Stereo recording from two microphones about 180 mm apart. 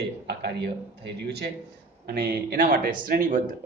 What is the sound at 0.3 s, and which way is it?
A man's voice, 70° right (ahead or behind).